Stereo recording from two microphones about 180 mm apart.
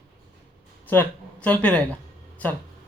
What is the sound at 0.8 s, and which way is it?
Speech, 10° left (ahead or behind).